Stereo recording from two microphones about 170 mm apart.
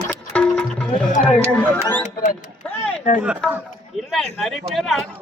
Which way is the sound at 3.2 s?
5° right (ahead or behind).